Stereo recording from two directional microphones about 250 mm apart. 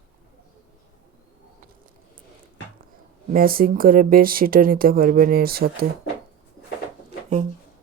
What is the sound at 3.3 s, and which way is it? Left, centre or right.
Speech, right.